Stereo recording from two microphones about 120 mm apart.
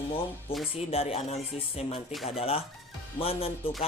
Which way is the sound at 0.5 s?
50° left (ahead or behind).